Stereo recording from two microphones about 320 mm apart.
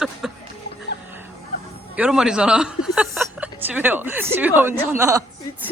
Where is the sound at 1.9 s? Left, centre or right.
Centre.